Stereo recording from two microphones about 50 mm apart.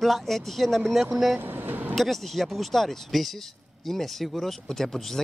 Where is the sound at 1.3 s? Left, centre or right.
Right.